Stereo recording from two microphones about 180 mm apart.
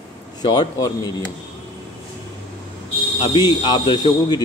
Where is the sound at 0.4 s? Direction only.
25° left (ahead or behind).